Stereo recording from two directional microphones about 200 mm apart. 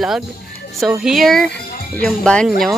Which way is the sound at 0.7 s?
Centre (ahead or behind).